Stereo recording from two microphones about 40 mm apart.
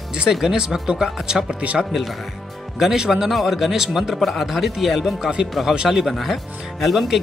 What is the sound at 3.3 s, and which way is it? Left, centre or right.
Speech, centre.